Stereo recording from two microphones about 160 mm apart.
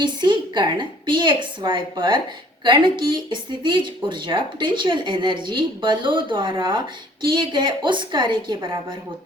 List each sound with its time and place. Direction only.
0.0 s a woman's voice: 30° right (ahead or behind)